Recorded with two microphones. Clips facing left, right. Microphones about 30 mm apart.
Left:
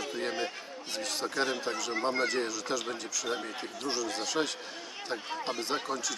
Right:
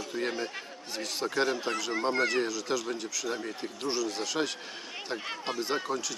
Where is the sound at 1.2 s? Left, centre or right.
Centre.